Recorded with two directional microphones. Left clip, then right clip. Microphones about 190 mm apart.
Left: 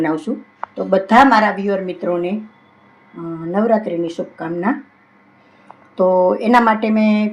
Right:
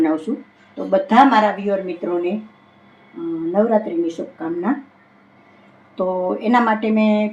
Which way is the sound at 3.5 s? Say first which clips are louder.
Left 1 dB; 45° left (ahead or behind).